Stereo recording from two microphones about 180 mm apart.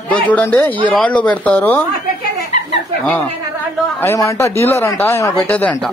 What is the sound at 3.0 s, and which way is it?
Speech, 10° left (ahead or behind).